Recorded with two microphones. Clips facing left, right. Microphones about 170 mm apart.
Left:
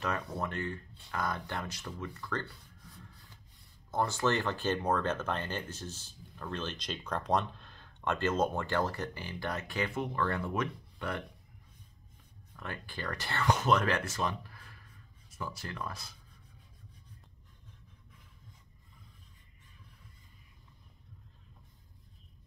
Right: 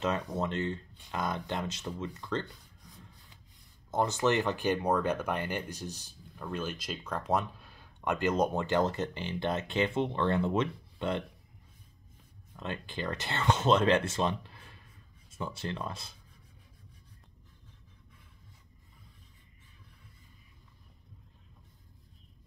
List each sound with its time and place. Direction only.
0.0 s speech: 20° right (ahead or behind)
12.5 s speech: 20° right (ahead or behind)